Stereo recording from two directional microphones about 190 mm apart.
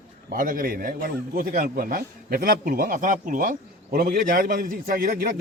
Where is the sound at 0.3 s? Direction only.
45° right (ahead or behind).